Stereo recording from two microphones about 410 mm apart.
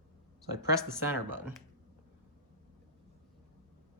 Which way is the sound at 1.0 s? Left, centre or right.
Centre.